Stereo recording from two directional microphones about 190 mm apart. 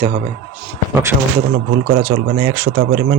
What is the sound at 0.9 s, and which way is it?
Speech, 15° right (ahead or behind).